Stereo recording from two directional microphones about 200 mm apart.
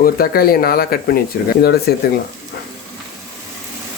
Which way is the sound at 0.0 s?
45° left (ahead or behind).